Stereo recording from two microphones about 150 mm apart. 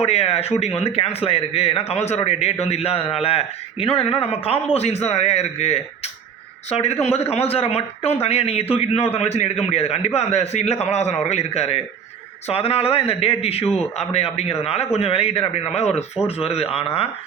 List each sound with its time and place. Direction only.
0.0 s a man's voice: 45° left (ahead or behind)